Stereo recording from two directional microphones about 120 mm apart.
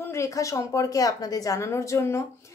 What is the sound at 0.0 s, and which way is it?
A woman's voice, 25° left (ahead or behind).